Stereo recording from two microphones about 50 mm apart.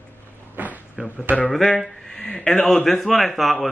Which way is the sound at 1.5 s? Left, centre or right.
Centre.